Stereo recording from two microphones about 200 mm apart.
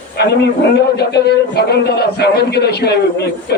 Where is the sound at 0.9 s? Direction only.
55° left (ahead or behind).